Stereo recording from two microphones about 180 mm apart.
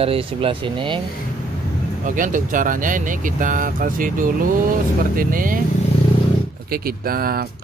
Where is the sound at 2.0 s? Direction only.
45° right (ahead or behind).